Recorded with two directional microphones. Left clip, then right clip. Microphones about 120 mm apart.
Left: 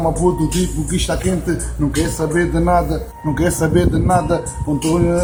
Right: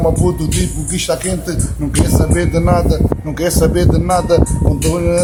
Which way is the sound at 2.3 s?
5° right (ahead or behind).